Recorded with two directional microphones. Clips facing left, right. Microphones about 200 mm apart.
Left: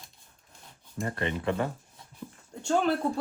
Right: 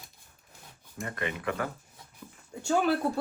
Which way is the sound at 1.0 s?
30° left (ahead or behind).